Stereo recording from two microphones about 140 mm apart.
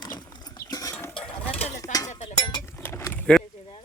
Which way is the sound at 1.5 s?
45° left (ahead or behind).